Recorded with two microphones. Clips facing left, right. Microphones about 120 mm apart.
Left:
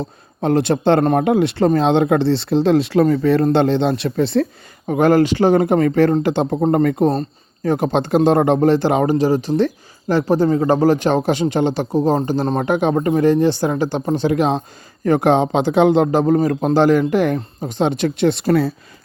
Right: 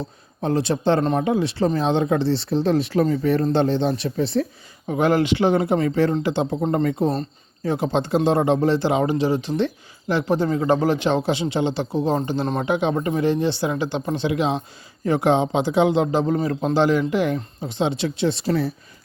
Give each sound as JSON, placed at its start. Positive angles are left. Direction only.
{"t": 0.0, "sound": "speech", "side_deg": 65}
{"t": 4.9, "sound": "speech", "side_deg": 50}